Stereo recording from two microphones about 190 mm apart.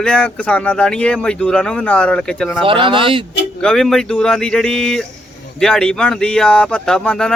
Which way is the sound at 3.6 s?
5° left (ahead or behind).